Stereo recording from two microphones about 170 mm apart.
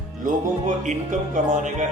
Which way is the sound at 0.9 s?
45° right (ahead or behind).